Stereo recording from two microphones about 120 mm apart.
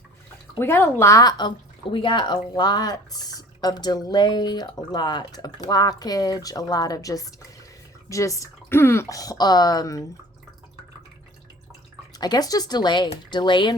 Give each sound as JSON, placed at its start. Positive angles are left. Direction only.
{"t": 0.6, "sound": "speech", "side_deg": 20}
{"t": 12.1, "sound": "speech", "side_deg": 35}